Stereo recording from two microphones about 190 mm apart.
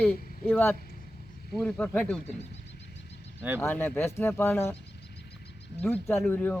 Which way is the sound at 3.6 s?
10° left (ahead or behind).